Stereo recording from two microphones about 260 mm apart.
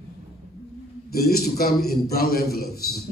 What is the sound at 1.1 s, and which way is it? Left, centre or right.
A man's voice, left.